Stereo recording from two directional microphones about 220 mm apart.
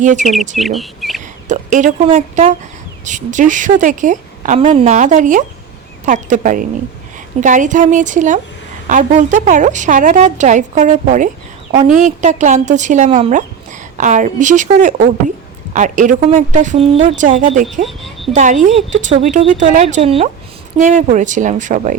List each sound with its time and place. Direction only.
0.0 s a woman's voice: 35° right (ahead or behind)
0.5 s speech: centre (ahead or behind)
1.5 s a woman's voice: 35° right (ahead or behind)
17.8 s a sound: centre (ahead or behind)
18.3 s a woman's voice: 35° right (ahead or behind)